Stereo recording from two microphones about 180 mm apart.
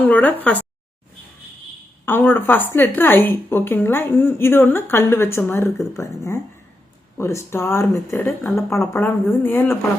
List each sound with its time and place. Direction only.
0.0 s speech: 10° left (ahead or behind)
2.0 s a woman's voice: 10° left (ahead or behind)